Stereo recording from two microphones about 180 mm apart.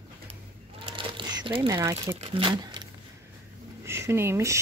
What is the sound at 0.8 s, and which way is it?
Crumpling, 25° right (ahead or behind).